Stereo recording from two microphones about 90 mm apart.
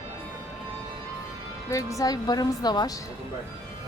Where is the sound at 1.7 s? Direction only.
35° left (ahead or behind).